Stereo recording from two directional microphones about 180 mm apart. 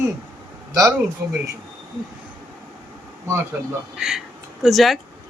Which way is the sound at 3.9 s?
5° right (ahead or behind).